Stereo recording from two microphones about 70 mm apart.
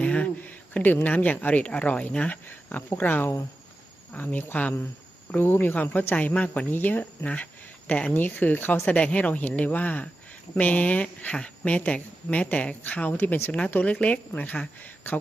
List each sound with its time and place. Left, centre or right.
0.0 s a sound: centre
0.9 s a woman's voice: left
9.0 s a woman's voice: centre